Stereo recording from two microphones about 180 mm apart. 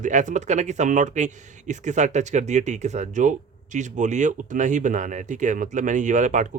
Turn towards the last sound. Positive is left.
turn(degrees=-45)  # may be behind; listen again after turning